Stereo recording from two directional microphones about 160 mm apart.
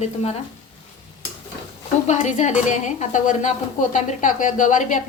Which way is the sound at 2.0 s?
50° left (ahead or behind).